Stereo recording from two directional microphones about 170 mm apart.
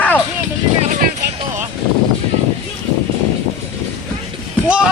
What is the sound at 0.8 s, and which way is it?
Speech, 45° right (ahead or behind).